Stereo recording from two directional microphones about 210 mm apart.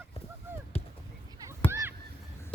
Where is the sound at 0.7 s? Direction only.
30° left (ahead or behind).